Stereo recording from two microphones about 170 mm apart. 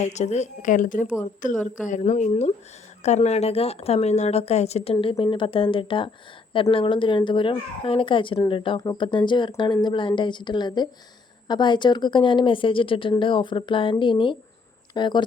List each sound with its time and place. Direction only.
0.0 s a woman's voice: 45° left (ahead or behind); by 15.2 s 25° left (ahead or behind)